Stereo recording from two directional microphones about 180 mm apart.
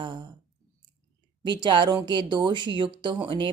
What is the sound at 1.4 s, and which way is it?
Speech, 25° right (ahead or behind).